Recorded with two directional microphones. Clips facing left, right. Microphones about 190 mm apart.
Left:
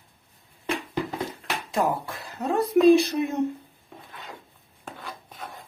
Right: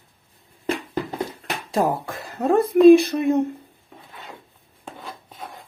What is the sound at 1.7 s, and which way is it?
Speech, 45° right (ahead or behind).